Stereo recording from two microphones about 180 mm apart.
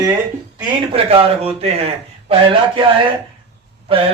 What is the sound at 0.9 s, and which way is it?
A man's voice, 30° right (ahead or behind).